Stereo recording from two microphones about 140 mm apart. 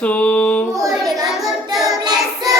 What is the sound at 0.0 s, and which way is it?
Female singing, 10° left (ahead or behind).